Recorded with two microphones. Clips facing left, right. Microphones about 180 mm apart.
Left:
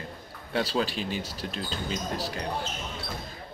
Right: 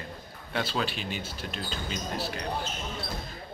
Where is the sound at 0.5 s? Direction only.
35° left (ahead or behind).